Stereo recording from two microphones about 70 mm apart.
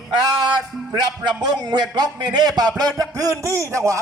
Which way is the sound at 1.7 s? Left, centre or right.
Right.